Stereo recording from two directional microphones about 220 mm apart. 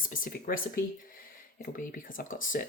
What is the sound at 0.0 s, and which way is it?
Speech, 40° left (ahead or behind).